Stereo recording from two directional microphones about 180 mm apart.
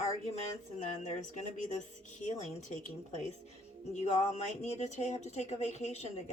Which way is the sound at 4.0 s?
40° left (ahead or behind).